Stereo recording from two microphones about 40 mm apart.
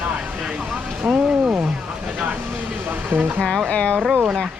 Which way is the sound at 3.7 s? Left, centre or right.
Left.